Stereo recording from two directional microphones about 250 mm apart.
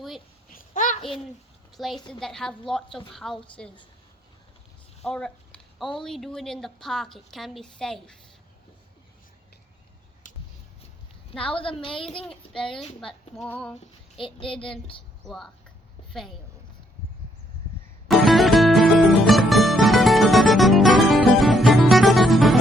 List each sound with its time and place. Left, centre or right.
0.5 s a sound: left
1.7 s a woman's voice: centre
5.0 s speech: centre
11.5 s a child's voice: left
12.2 s speech: centre
13.7 s a child's voice: left
15.2 s speech: centre
18.1 s music: centre